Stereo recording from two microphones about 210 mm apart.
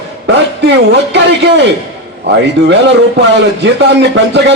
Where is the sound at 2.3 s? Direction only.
55° right (ahead or behind).